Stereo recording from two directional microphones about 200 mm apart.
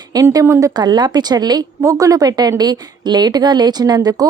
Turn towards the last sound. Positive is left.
turn(degrees=-20)  # may be behind; listen again after turning